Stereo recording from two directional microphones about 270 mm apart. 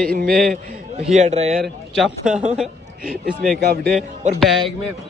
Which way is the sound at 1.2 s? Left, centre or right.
Right.